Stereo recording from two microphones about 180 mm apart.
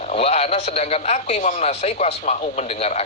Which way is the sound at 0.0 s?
35° left (ahead or behind).